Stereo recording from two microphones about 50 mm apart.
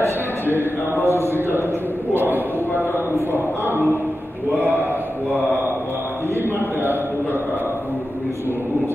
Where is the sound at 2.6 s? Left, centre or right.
Left.